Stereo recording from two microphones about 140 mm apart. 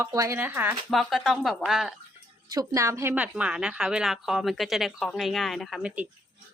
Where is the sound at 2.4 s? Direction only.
25° right (ahead or behind); by 6.0 s 5° right (ahead or behind).